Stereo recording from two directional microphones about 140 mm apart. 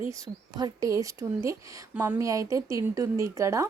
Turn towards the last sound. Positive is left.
turn(degrees=-20)  # may be behind; listen again after turning